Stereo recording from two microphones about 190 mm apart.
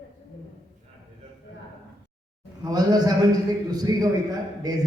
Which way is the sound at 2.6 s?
20° right (ahead or behind).